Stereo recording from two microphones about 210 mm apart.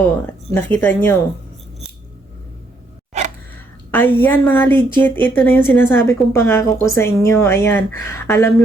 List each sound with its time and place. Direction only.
0.5 s a woman's voice: 5° left (ahead or behind)
3.1 s a sound: 35° right (ahead or behind)
3.9 s a woman's voice: 10° left (ahead or behind)